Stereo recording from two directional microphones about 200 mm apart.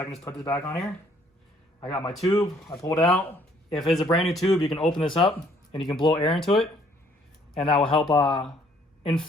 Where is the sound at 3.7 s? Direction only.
Centre (ahead or behind).